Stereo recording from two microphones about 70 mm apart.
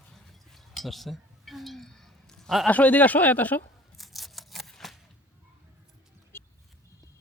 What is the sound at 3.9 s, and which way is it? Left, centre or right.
Scissors, centre.